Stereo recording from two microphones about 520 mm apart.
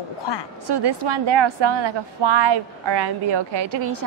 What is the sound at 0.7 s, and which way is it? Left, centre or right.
A woman's voice, right.